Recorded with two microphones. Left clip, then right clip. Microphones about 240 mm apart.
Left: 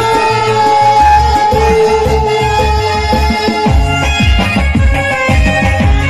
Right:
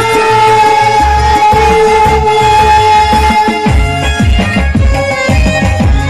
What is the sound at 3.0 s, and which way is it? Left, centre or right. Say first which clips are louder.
Music: right 5 dB; right.